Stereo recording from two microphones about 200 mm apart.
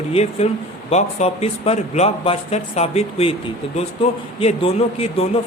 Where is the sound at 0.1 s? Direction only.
30° left (ahead or behind).